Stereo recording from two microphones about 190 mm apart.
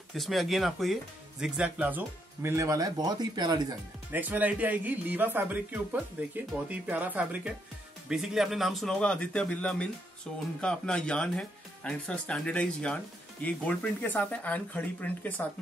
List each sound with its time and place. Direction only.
0.1 s a man's voice: centre (ahead or behind); by 3.7 s 20° right (ahead or behind)
4.1 s a man's voice: 10° right (ahead or behind); by 15.4 s 10° left (ahead or behind)